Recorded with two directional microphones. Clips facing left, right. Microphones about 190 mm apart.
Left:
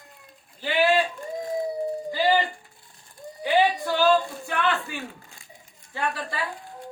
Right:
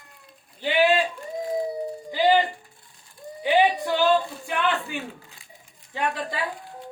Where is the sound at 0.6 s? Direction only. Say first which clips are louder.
Right 2 dB; 20° right (ahead or behind).